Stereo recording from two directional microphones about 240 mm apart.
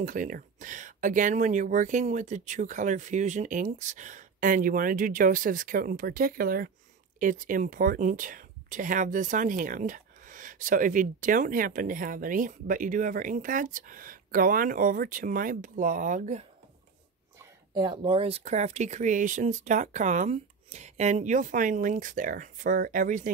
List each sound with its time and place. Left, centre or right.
0.0 s speech: right
17.7 s speech: centre; by 23.3 s right